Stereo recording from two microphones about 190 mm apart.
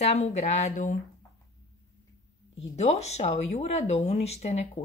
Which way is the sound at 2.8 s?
35° left (ahead or behind).